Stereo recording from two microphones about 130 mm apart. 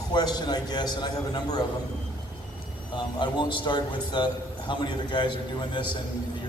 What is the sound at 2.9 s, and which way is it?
A man's voice, 40° left (ahead or behind).